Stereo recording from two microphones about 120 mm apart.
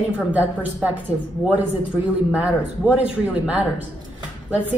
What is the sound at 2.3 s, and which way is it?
A woman's voice, 10° right (ahead or behind).